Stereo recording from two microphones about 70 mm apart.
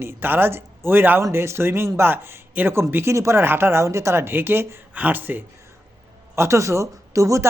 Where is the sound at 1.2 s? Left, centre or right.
Right.